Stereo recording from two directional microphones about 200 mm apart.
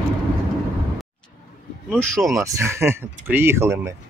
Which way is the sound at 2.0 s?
Centre (ahead or behind).